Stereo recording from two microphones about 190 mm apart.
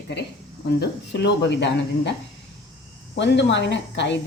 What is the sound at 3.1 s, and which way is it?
A woman's voice, 65° left (ahead or behind).